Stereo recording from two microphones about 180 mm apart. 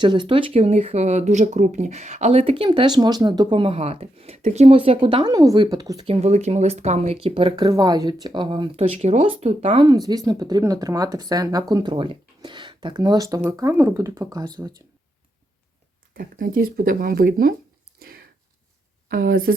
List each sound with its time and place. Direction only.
0.0 s speech: 25° right (ahead or behind)
6.1 s speech: 35° right (ahead or behind); by 14.7 s 20° right (ahead or behind)
16.1 s speech: 55° right (ahead or behind)
19.0 s speech: 55° right (ahead or behind)